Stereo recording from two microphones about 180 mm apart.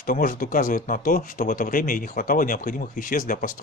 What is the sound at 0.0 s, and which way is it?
Speech, 50° left (ahead or behind).